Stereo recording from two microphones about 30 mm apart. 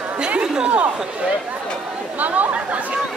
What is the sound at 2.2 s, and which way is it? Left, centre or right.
Chatter, right.